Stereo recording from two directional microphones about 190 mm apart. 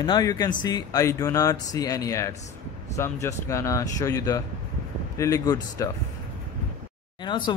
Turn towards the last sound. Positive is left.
turn(degrees=25)  # may be behind; listen again after turning